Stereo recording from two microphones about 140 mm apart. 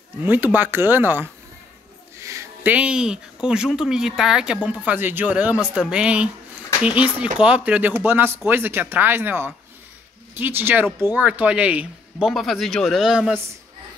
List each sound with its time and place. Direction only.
0.2 s speech: 15° right (ahead or behind)